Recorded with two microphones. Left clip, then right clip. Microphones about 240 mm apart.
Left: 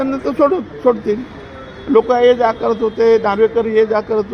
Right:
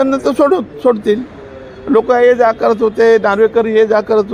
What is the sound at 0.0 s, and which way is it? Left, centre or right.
A man's voice, right.